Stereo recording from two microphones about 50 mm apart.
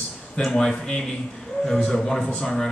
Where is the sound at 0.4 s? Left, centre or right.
Centre.